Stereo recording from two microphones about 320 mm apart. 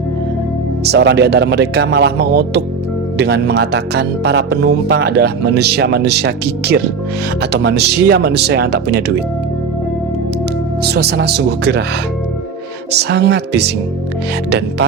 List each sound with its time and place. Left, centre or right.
0.9 s music: right
10.8 s music: right
12.9 s music: right